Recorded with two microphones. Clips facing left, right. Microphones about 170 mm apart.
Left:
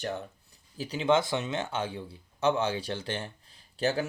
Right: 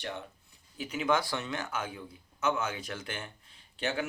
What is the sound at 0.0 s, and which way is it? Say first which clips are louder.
Speech: left 5 dB; 40° left (ahead or behind).